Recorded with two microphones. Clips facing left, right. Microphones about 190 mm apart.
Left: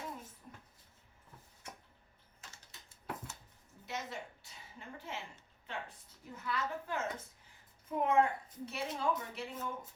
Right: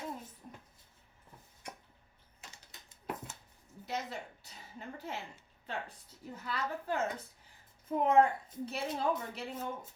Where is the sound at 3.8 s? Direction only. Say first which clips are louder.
Right 3 dB; 35° right (ahead or behind).